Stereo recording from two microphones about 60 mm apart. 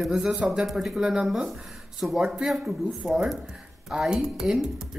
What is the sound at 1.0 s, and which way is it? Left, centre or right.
Speech, centre.